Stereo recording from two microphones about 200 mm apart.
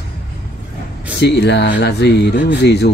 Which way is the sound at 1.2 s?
60° left (ahead or behind).